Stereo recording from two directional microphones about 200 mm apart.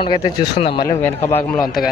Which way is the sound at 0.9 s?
10° left (ahead or behind).